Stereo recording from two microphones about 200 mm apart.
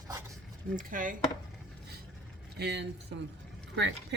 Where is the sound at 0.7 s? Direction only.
45° right (ahead or behind).